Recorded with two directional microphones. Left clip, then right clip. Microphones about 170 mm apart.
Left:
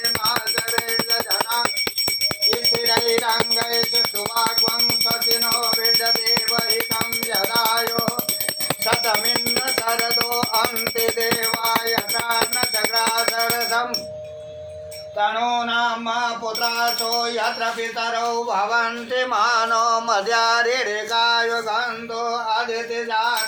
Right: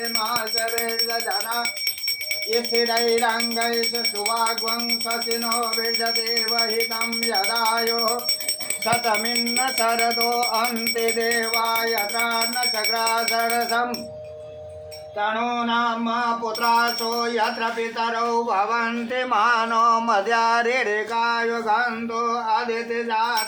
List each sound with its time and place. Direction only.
18.3 s music: 25° right (ahead or behind)